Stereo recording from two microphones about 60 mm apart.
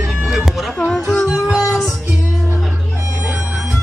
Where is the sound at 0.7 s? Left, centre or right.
Centre.